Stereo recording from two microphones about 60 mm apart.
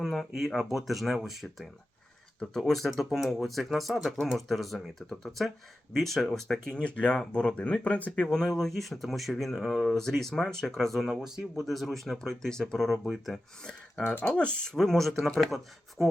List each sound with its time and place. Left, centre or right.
0.0 s speech: centre
6.8 s speech: centre
8.1 s speech: centre
12.9 s speech: centre
14.3 s speech: centre